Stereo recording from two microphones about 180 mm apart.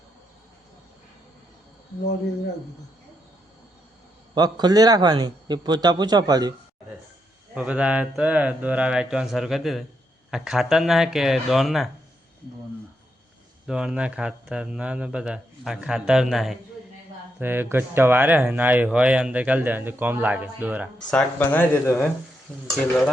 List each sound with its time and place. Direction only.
4.4 s a man's voice: 20° right (ahead or behind)
7.5 s speech: 5° right (ahead or behind)
13.7 s speech: 5° right (ahead or behind)
17.4 s speech: 10° right (ahead or behind)
21.1 s speech: 10° left (ahead or behind)